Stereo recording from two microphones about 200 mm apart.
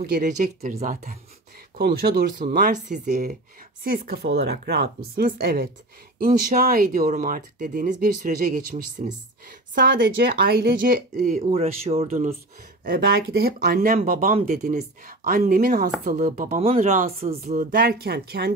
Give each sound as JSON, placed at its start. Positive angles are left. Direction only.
{"t": 0.0, "sound": "speech", "side_deg": -45}
{"t": 1.8, "sound": "speech", "side_deg": -50}
{"t": 3.8, "sound": "speech", "side_deg": -50}
{"t": 12.8, "sound": "speech", "side_deg": -50}